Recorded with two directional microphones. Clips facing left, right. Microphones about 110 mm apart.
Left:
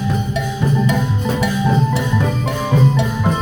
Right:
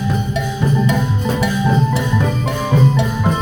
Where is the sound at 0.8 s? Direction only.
25° right (ahead or behind).